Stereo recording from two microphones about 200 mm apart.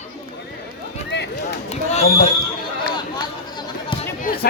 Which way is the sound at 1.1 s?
60° left (ahead or behind).